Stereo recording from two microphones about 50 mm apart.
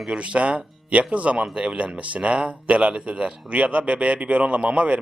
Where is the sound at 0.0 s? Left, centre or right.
Centre.